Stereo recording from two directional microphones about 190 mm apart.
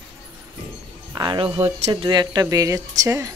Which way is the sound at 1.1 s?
25° right (ahead or behind).